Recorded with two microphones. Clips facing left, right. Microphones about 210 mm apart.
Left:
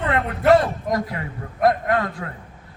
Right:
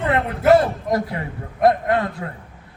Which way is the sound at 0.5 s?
25° right (ahead or behind).